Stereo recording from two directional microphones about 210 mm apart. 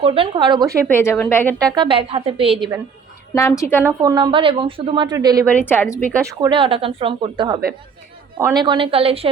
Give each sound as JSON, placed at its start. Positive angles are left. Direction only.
{"t": 0.0, "sound": "a woman's voice", "side_deg": -25}
{"t": 0.9, "sound": "speech", "side_deg": 10}
{"t": 1.7, "sound": "a woman's voice", "side_deg": -20}
{"t": 3.3, "sound": "speech", "side_deg": 15}
{"t": 3.8, "sound": "a woman's voice", "side_deg": -20}
{"t": 5.5, "sound": "speech", "side_deg": 10}
{"t": 6.4, "sound": "a woman's voice", "side_deg": -25}